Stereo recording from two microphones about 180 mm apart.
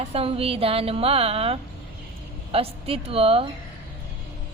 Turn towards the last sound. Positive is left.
turn(degrees=-30)  # may be behind; listen again after turning